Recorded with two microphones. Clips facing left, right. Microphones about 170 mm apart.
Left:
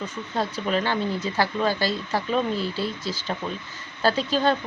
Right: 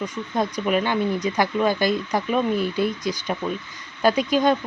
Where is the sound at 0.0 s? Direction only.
15° right (ahead or behind).